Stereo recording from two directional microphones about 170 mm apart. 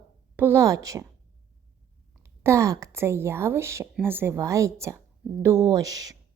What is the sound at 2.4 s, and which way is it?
A woman's voice, 15° right (ahead or behind).